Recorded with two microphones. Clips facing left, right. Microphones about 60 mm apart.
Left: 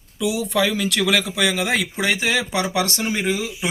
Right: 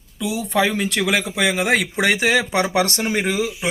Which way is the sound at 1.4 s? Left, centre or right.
Right.